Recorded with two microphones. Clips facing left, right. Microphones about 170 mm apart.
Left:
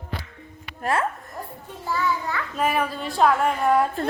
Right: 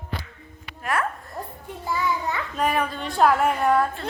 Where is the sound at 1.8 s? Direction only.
15° right (ahead or behind).